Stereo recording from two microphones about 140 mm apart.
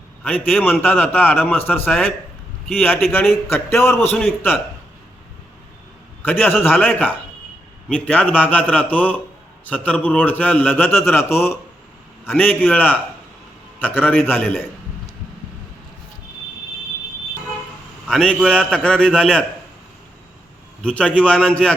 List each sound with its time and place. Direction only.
0.2 s a man's voice: 10° left (ahead or behind)
3.1 s a man's voice: 15° left (ahead or behind)
6.2 s a man's voice: 15° left (ahead or behind)
18.1 s a man's voice: 5° left (ahead or behind)
20.8 s a man's voice: 10° left (ahead or behind)